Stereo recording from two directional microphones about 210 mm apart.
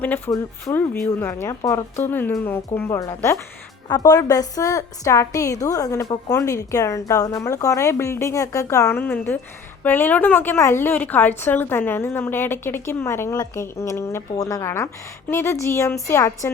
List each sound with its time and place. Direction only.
0.0 s a woman's voice: 10° left (ahead or behind)